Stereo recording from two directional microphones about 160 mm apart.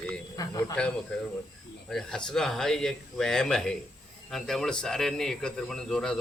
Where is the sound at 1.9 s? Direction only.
5° left (ahead or behind).